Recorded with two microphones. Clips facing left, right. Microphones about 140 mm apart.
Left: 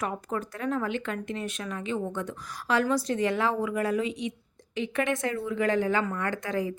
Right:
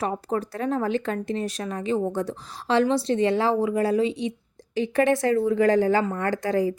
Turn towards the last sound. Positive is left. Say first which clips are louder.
# right 6 dB
turn(degrees=-35)  # may be behind; listen again after turning